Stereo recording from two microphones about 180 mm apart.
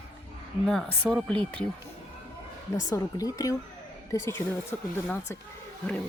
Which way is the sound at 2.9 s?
20° left (ahead or behind).